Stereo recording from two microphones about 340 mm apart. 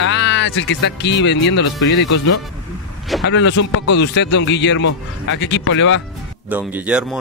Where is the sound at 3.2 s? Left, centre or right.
Left.